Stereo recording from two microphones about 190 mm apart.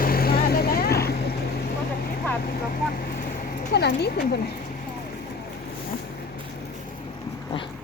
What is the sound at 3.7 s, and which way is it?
Speech, 60° left (ahead or behind).